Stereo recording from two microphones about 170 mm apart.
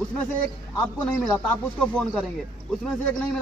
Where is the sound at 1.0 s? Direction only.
5° left (ahead or behind).